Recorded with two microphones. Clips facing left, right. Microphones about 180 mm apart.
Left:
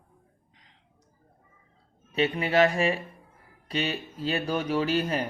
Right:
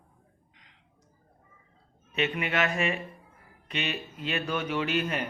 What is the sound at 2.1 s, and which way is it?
A man's voice, 35° left (ahead or behind).